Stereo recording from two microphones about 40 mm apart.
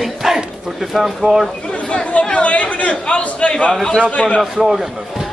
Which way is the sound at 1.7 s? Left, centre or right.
Left.